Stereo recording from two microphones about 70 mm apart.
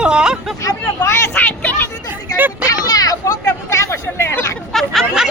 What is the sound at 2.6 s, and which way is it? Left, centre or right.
Vehicle, left.